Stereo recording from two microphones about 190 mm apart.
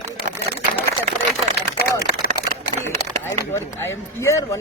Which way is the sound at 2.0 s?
55° left (ahead or behind).